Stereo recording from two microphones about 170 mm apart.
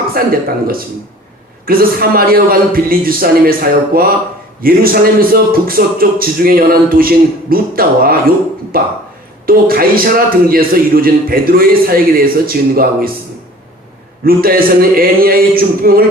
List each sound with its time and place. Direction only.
0.1 s a man's voice: 60° right (ahead or behind)
14.3 s a man's voice: 60° right (ahead or behind)